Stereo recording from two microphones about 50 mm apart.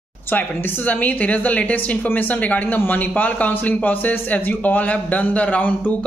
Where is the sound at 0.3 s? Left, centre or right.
Left.